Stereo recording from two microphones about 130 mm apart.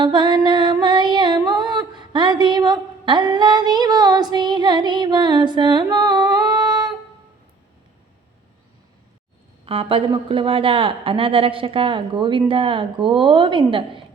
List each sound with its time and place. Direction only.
0.0 s music: 35° right (ahead or behind)
9.6 s a woman's voice: 45° right (ahead or behind)